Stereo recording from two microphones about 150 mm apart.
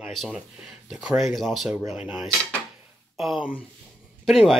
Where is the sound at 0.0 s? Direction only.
Centre (ahead or behind).